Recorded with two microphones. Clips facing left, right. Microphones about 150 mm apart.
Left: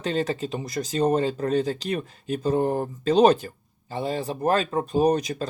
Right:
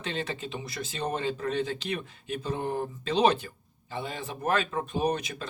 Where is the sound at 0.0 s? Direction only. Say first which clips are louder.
Left 8 dB; 40° left (ahead or behind).